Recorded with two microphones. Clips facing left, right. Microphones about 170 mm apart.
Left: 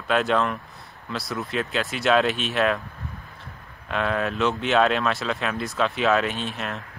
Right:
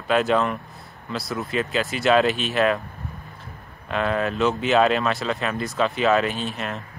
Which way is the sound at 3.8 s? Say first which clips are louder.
Right 2 dB; centre (ahead or behind).